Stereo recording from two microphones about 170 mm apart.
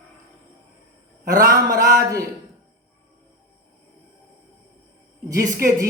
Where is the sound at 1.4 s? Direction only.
20° right (ahead or behind).